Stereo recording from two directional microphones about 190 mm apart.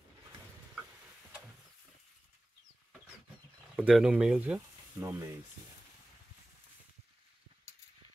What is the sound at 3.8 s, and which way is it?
Speech, 5° right (ahead or behind).